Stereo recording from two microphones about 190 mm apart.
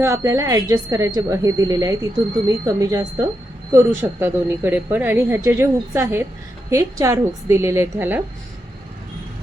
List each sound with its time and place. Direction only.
0.0 s speech: 15° right (ahead or behind)